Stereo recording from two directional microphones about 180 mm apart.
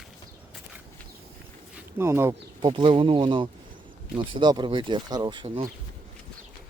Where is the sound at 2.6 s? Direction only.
25° right (ahead or behind).